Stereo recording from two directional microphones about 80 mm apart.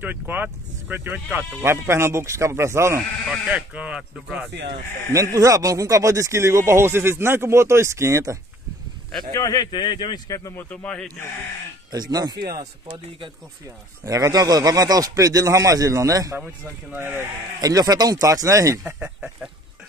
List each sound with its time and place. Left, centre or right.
0.0 s speech: right
3.4 s speech: centre
5.1 s speech: right
9.3 s speech: left
9.7 s speech: left
10.7 s speech: centre
11.9 s speech: right
14.0 s speech: right
16.3 s speech: right
17.6 s speech: right
18.9 s speech: centre